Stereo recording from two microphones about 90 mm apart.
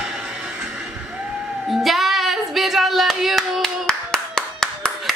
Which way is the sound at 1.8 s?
Centre (ahead or behind).